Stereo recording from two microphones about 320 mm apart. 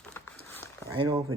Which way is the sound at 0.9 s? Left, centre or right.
Centre.